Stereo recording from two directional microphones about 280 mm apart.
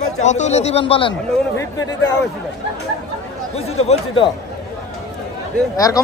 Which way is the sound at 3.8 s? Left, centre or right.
Left.